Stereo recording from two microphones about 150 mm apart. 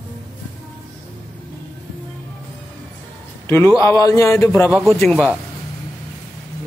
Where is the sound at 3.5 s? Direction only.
15° left (ahead or behind).